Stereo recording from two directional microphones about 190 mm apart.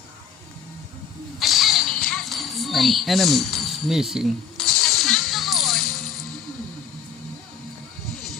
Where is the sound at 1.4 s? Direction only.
Centre (ahead or behind).